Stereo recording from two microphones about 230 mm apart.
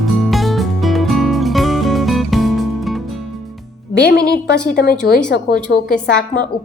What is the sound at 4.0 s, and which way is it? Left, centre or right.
A woman's voice, left.